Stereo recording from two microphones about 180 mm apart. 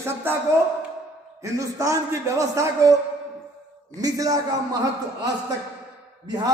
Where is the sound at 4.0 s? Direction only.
20° right (ahead or behind).